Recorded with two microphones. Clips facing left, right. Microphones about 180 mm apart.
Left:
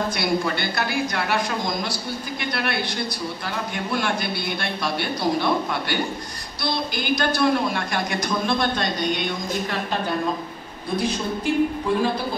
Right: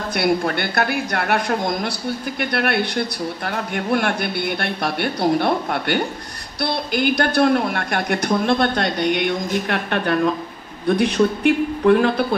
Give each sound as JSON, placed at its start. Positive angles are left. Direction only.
{"t": 0.1, "sound": "a man's voice", "side_deg": -60}